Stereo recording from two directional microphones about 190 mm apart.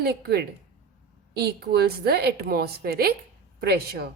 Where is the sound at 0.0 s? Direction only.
55° right (ahead or behind).